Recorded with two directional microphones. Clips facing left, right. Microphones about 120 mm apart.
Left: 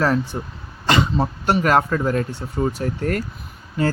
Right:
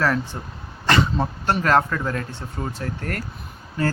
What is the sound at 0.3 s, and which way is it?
Speech, 15° left (ahead or behind).